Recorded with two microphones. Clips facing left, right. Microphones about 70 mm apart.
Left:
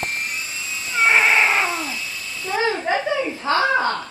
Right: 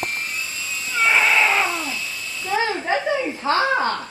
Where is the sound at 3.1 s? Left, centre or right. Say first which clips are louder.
Even; right.